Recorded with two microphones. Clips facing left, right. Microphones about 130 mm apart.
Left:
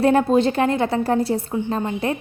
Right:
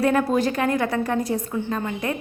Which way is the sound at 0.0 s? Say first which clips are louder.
Left 4 dB; 30° left (ahead or behind).